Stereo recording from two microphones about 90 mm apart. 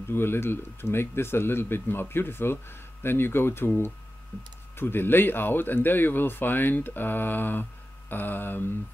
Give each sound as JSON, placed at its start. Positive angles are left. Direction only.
{"t": 0.1, "sound": "speech", "side_deg": 25}